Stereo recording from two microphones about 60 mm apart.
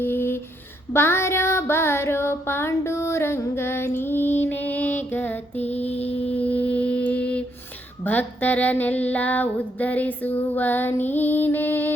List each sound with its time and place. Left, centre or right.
0.0 s a sound: left
0.9 s child singing: left
8.0 s female singing: left